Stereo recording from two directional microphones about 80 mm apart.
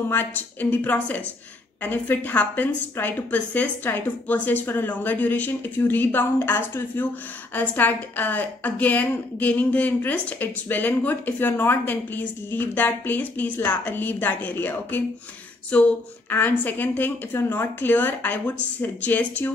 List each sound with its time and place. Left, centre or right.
0.1 s a woman's voice: left